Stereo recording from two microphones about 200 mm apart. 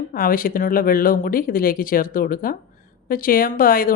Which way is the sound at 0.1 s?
45° left (ahead or behind).